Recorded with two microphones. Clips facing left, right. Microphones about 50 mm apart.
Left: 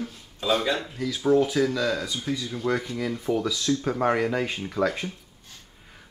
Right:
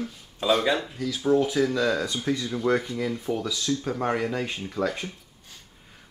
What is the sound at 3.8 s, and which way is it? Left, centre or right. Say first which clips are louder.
Speech: left 5 dB; centre.